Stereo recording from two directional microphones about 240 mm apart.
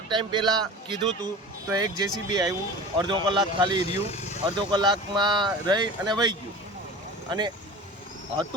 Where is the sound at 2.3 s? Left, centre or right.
Centre.